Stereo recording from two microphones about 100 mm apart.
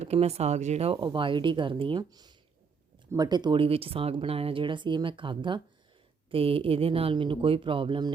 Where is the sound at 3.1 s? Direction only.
45° right (ahead or behind).